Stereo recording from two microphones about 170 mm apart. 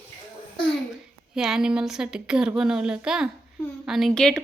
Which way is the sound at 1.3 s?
5° right (ahead or behind).